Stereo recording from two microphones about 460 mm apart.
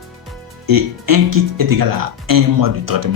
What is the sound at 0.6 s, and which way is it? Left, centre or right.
Speech, right.